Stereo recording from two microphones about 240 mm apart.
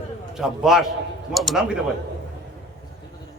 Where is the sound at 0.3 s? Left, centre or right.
Centre.